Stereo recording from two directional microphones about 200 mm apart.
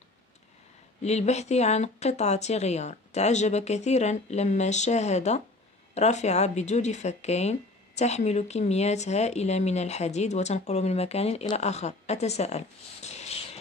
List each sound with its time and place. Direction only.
1.0 s speech: 35° left (ahead or behind)